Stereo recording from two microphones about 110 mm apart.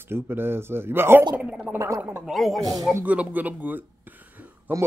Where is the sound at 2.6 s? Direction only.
35° right (ahead or behind).